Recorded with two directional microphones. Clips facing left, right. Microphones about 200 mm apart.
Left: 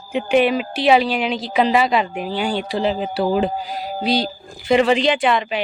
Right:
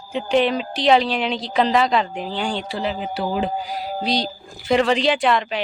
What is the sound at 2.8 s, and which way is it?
Speech, 35° left (ahead or behind).